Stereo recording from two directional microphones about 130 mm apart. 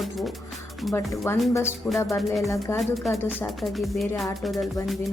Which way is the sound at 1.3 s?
20° left (ahead or behind).